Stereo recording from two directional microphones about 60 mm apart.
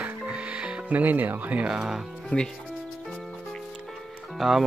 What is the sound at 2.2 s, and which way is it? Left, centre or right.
Speech, centre.